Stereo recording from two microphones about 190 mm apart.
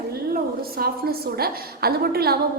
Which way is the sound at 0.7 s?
55° right (ahead or behind).